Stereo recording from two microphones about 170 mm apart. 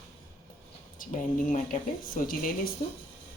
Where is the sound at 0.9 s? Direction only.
50° left (ahead or behind).